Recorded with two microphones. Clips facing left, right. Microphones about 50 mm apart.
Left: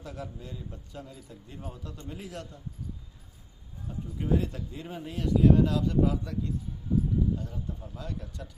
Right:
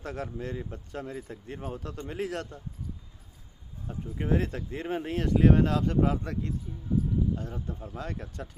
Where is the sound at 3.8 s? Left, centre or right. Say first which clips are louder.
Right 1 dB; right.